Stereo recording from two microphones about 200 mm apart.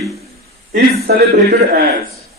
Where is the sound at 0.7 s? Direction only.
50° right (ahead or behind).